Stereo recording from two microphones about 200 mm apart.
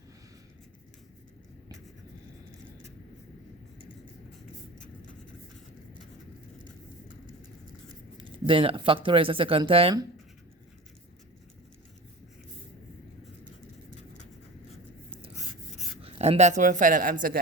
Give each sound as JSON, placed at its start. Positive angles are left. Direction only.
{"t": 8.2, "sound": "speech", "side_deg": -25}
{"t": 16.0, "sound": "speech", "side_deg": -30}